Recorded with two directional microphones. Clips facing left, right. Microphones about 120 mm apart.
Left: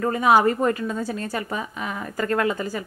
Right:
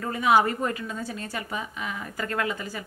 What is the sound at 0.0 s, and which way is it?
Speech, 45° left (ahead or behind).